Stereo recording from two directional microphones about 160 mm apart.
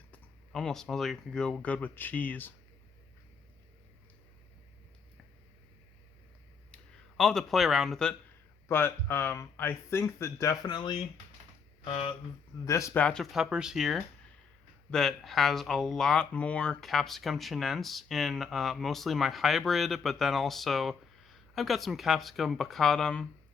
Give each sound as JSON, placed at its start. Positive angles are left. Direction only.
{"t": 0.1, "sound": "speech", "side_deg": 5}
{"t": 7.2, "sound": "speech", "side_deg": 5}
{"t": 8.6, "sound": "speech", "side_deg": 15}
{"t": 12.6, "sound": "speech", "side_deg": 20}